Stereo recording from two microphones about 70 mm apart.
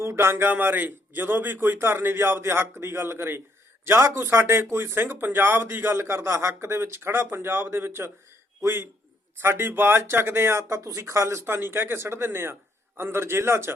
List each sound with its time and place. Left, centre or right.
0.0 s speech: right